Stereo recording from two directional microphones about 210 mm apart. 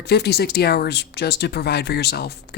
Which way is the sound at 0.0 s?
50° left (ahead or behind).